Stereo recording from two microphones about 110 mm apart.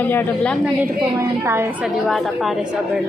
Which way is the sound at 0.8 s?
25° right (ahead or behind).